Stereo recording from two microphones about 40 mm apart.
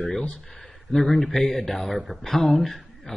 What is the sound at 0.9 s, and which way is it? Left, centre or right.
Speech, centre.